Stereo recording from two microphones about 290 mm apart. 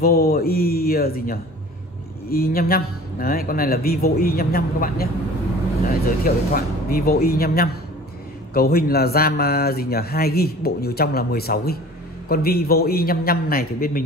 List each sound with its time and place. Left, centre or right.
0.0 s speech: left